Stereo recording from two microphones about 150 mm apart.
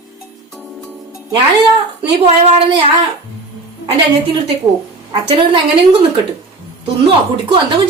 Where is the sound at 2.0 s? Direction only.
40° right (ahead or behind).